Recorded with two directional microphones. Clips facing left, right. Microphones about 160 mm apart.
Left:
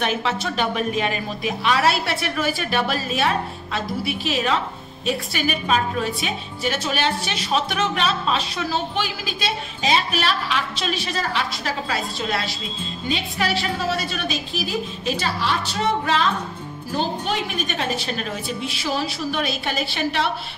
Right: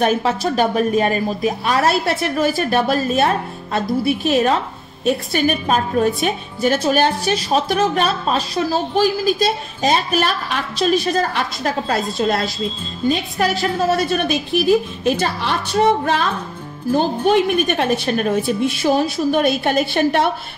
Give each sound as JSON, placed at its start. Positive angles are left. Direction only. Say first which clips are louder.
{"t": 0.0, "sound": "a woman's voice", "louder": "right 6 dB", "side_deg": -45}